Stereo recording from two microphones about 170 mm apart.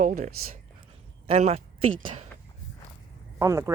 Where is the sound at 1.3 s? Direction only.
40° right (ahead or behind).